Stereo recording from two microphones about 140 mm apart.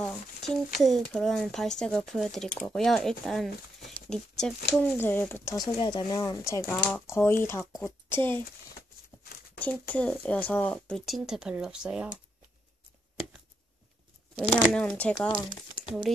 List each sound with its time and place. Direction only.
0.0 s speech: 5° left (ahead or behind)
5.8 s a woman's voice: 30° left (ahead or behind); by 8.4 s 15° left (ahead or behind)
9.6 s speech: 10° left (ahead or behind); by 12.1 s 5° right (ahead or behind)
14.5 s speech: 5° left (ahead or behind)